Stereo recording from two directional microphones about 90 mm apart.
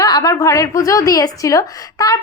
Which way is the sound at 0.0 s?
40° left (ahead or behind).